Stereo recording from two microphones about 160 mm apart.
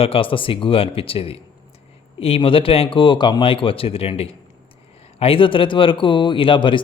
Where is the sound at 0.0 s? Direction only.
35° left (ahead or behind).